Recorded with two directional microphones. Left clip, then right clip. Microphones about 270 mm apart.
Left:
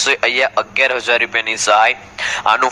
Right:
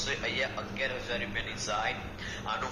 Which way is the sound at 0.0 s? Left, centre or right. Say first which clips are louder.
Left 18 dB; left.